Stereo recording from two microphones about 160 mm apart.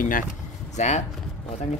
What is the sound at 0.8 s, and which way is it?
Speech, 45° left (ahead or behind).